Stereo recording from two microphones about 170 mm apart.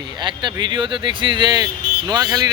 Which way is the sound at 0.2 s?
25° right (ahead or behind).